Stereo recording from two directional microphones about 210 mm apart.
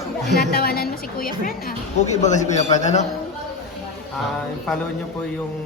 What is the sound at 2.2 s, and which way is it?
Speech, 35° left (ahead or behind).